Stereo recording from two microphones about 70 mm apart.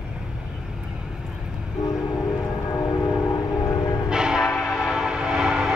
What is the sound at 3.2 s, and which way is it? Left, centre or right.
Train, left.